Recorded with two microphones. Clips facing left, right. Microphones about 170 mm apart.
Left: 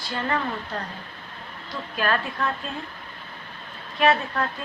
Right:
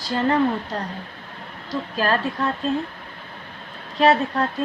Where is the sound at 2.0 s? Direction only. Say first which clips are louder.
Right 3 dB; 30° right (ahead or behind).